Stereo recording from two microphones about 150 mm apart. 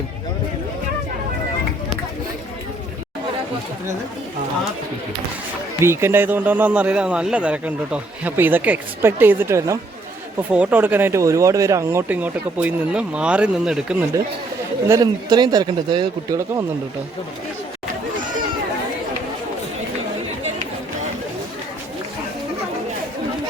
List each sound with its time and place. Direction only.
5.8 s speech: 15° right (ahead or behind)
14.8 s speech: 25° right (ahead or behind)